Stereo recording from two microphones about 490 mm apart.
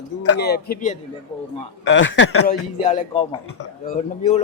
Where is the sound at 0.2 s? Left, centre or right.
Left.